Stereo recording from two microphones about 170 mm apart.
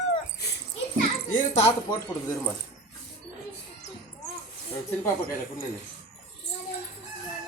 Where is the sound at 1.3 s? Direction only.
40° left (ahead or behind).